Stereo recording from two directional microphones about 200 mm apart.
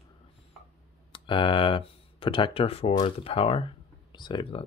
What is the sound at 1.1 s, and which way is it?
Speech, 25° left (ahead or behind).